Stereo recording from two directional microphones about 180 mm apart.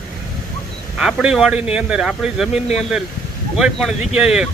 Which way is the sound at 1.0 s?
5° right (ahead or behind).